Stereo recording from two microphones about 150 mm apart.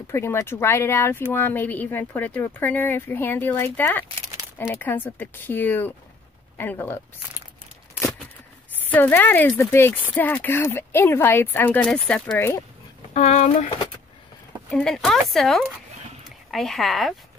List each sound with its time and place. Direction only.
0.1 s speech: 15° left (ahead or behind)
8.9 s speech: 10° left (ahead or behind)
12.4 s speech: 15° left (ahead or behind)
13.1 s speech: 50° left (ahead or behind)
14.7 s speech: centre (ahead or behind)